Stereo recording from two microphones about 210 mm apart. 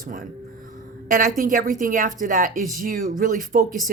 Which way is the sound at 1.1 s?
40° right (ahead or behind).